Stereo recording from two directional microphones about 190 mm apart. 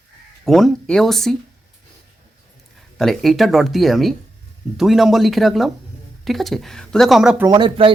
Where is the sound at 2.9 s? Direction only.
Centre (ahead or behind).